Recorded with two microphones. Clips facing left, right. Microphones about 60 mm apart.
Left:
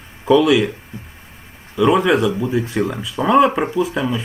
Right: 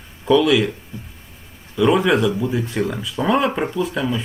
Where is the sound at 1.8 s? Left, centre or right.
Centre.